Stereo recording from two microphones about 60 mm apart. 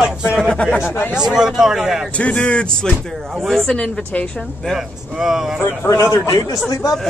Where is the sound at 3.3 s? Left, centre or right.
Centre.